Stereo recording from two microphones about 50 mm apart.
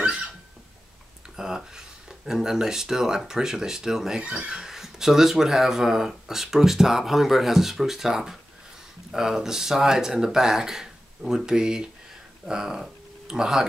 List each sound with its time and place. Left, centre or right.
1.3 s speech: centre
4.6 s speech: centre